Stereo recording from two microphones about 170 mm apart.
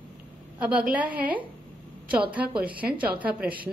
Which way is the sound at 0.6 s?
10° right (ahead or behind).